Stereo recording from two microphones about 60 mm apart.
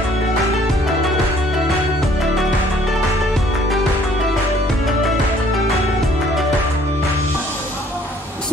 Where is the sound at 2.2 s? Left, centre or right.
Centre.